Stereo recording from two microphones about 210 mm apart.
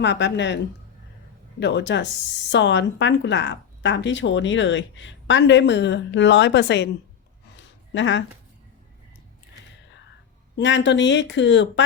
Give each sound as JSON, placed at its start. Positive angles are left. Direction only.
{"t": 0.0, "sound": "a woman's voice", "side_deg": 55}
{"t": 7.9, "sound": "a woman's voice", "side_deg": 60}
{"t": 10.6, "sound": "a woman's voice", "side_deg": 60}